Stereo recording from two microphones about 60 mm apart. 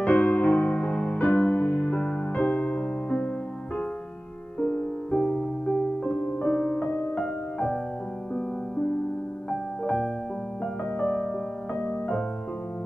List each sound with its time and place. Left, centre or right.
0.0 s music: left
2.3 s music: left
4.6 s music: centre
9.5 s music: centre